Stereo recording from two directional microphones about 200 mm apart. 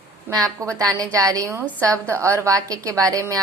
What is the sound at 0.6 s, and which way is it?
A woman's voice, 15° right (ahead or behind).